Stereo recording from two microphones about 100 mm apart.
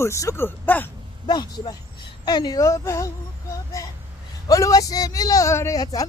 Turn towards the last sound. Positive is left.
turn(degrees=40)  # may be behind; listen again after turning